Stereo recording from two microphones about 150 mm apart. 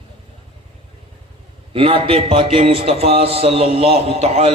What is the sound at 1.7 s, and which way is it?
A man's voice, 40° right (ahead or behind).